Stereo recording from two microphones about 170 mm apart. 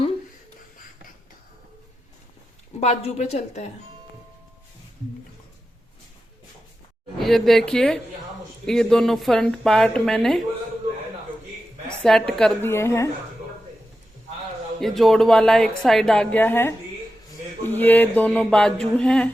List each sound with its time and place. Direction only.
2.8 s a woman's voice: 40° left (ahead or behind)
7.2 s a woman's voice: centre (ahead or behind)
12.0 s a woman's voice: 5° left (ahead or behind)
12.7 s a sound: 15° left (ahead or behind)
14.8 s a woman's voice: centre (ahead or behind)
17.7 s a sound: 10° left (ahead or behind)